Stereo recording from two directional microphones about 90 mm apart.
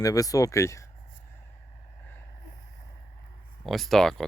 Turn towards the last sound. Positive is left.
turn(degrees=5)  # may be behind; listen again after turning